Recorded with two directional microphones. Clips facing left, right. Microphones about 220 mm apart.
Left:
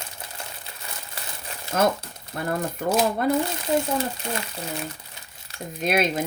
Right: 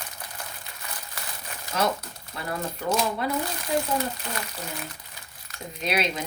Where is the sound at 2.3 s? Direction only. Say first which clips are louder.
Left 5 dB; 50° left (ahead or behind).